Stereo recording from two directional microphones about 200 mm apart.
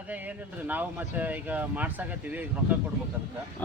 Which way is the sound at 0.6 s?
10° right (ahead or behind).